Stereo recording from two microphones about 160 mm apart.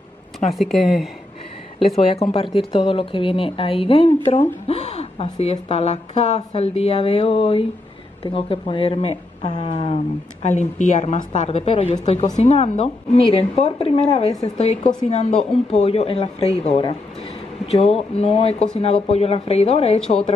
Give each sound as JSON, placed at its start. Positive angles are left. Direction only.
{"t": 0.6, "sound": "speech", "side_deg": 0}
{"t": 1.8, "sound": "speech", "side_deg": 35}
{"t": 10.4, "sound": "a woman's voice", "side_deg": 45}